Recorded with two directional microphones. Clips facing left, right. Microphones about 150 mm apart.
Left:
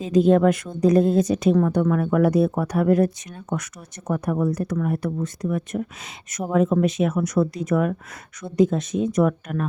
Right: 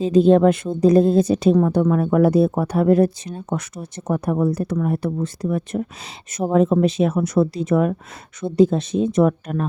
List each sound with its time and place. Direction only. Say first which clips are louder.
0.0 s a woman's voice: right 3 dB; 30° right (ahead or behind)